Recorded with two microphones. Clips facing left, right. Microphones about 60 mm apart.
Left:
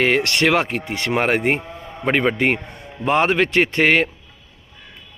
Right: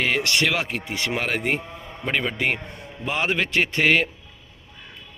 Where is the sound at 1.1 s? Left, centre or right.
Left.